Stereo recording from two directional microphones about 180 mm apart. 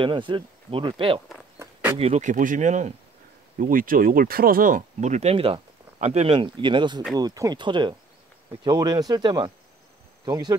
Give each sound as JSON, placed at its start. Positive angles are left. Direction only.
{"t": 0.0, "sound": "speech", "side_deg": -25}
{"t": 1.6, "sound": "a sound", "side_deg": -15}
{"t": 2.0, "sound": "speech", "side_deg": -35}